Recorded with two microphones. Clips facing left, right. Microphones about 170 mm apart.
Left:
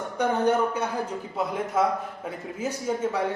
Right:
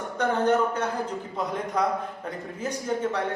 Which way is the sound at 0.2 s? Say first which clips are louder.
Even; 10° left (ahead or behind).